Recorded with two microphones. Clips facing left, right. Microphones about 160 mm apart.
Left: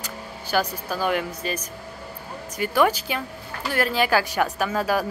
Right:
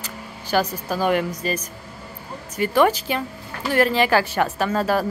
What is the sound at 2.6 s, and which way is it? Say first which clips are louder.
Speech: right 3 dB; 5° left (ahead or behind).